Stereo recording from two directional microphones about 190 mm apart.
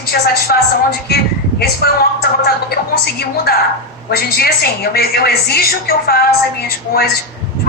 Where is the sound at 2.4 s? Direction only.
55° left (ahead or behind).